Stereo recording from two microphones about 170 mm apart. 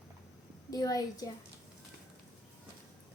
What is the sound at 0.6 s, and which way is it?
Speech, 20° left (ahead or behind).